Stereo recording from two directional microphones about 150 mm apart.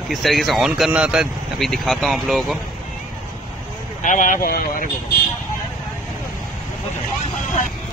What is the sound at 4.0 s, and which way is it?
Speech, 60° left (ahead or behind).